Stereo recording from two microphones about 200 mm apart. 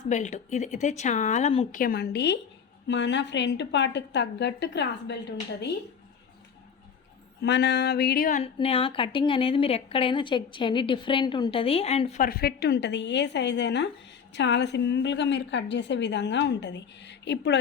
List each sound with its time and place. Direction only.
0.1 s speech: 35° left (ahead or behind)
1.8 s a woman's voice: 50° left (ahead or behind)
7.4 s a sound: 60° left (ahead or behind); by 8.4 s 45° left (ahead or behind)
8.5 s a woman's voice: 25° left (ahead or behind)
12.2 s a woman's voice: 50° left (ahead or behind)